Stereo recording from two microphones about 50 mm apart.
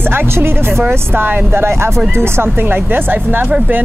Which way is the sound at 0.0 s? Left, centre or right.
Right.